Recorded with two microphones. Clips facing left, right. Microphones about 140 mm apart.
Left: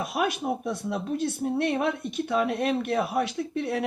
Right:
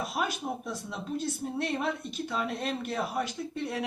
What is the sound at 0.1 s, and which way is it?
A man's voice, 60° left (ahead or behind).